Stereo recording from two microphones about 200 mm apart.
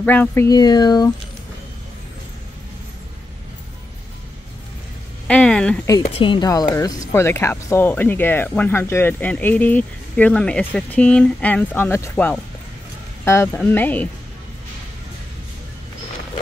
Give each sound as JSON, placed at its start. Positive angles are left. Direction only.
{"t": 0.0, "sound": "speech", "side_deg": 10}
{"t": 5.3, "sound": "a sound", "side_deg": 5}
{"t": 6.2, "sound": "speech", "side_deg": 20}